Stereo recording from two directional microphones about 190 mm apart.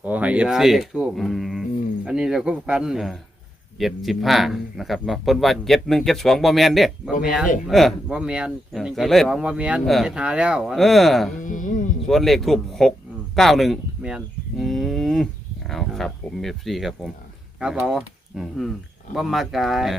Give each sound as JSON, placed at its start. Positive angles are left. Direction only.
{"t": 0.0, "sound": "speech", "side_deg": -10}
{"t": 11.3, "sound": "music", "side_deg": 45}
{"t": 12.0, "sound": "speech", "side_deg": 0}
{"t": 14.2, "sound": "livestock", "side_deg": 0}
{"t": 17.6, "sound": "speech", "side_deg": -5}